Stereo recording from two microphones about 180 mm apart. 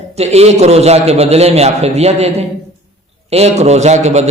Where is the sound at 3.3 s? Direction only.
35° right (ahead or behind).